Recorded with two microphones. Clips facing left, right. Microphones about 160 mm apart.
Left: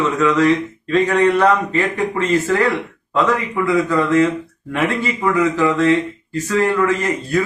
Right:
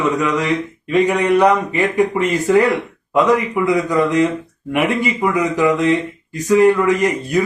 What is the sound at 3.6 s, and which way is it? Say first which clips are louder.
Speech: left 1 dB; 20° right (ahead or behind).